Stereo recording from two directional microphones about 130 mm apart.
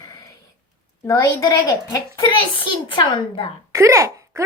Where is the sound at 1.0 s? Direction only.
25° left (ahead or behind).